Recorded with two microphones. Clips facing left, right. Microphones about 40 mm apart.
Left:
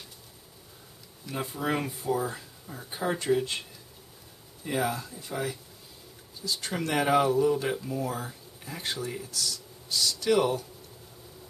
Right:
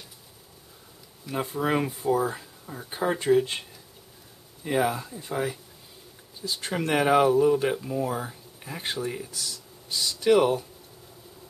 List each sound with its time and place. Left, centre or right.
1.2 s speech: centre
4.6 s speech: centre